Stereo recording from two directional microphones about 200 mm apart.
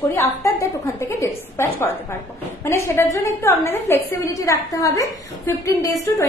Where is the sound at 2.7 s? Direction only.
15° left (ahead or behind).